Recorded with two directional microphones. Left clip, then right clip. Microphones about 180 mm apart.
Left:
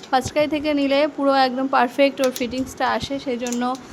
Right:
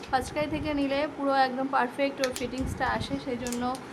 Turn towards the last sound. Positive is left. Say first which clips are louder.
# left 7 dB
turn(degrees=30)  # may be behind; listen again after turning